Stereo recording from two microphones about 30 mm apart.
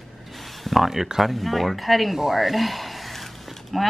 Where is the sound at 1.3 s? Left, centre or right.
Centre.